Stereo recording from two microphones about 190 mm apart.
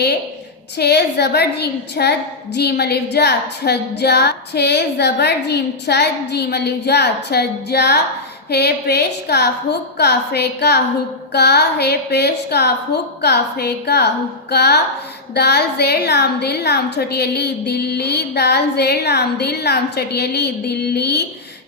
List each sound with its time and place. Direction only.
0.8 s a woman's voice: 60° left (ahead or behind)